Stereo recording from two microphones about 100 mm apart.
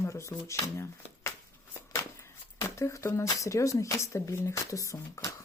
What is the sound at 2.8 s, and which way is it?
Speech, 30° left (ahead or behind).